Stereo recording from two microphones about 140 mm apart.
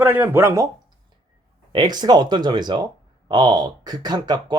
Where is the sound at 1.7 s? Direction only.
30° right (ahead or behind).